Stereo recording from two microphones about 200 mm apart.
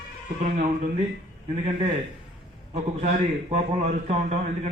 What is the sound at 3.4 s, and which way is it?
Speech, 30° right (ahead or behind).